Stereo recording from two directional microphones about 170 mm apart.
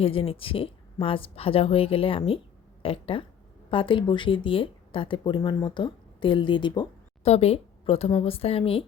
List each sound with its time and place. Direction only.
0.0 s a woman's voice: 35° left (ahead or behind)